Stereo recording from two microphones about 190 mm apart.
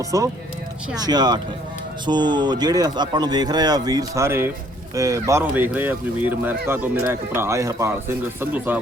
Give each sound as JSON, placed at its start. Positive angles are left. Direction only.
{"t": 0.0, "sound": "speech", "side_deg": -15}